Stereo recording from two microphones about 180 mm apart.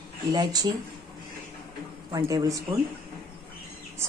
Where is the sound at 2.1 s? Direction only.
20° right (ahead or behind).